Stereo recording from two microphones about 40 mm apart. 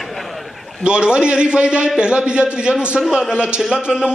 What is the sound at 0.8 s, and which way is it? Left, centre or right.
A man's voice, right.